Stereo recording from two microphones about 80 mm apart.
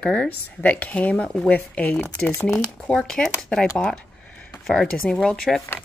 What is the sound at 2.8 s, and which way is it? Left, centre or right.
Speech, centre.